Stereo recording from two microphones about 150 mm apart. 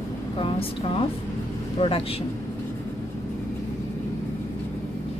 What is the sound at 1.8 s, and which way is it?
Speech, 35° left (ahead or behind).